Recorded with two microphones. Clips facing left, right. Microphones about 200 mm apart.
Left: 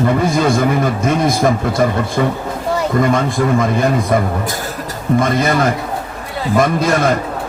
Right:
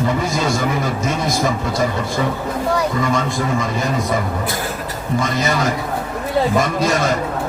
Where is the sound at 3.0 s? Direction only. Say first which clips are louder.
Left 5 dB; 55° left (ahead or behind).